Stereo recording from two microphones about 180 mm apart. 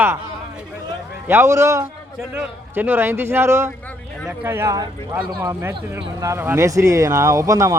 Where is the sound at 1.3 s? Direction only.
15° right (ahead or behind).